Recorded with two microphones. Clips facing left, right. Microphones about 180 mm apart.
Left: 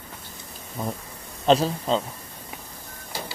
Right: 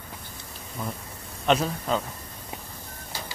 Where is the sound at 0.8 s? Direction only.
35° left (ahead or behind).